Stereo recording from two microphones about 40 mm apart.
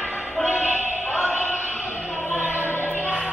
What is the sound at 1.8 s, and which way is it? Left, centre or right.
Opera, left.